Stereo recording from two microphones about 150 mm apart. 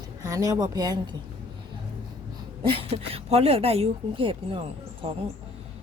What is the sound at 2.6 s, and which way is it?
A woman's voice, 35° right (ahead or behind).